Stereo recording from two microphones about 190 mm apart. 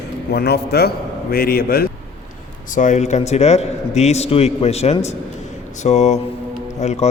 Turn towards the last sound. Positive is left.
turn(degrees=35)  # may be behind; listen again after turning